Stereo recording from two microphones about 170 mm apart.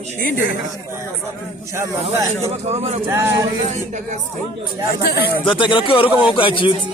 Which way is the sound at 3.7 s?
45° right (ahead or behind).